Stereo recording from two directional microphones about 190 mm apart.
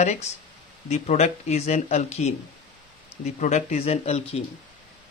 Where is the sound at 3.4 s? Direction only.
35° left (ahead or behind).